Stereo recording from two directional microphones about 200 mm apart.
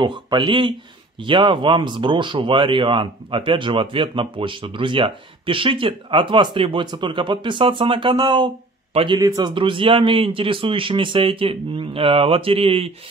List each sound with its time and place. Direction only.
0.0 s speech: 20° right (ahead or behind)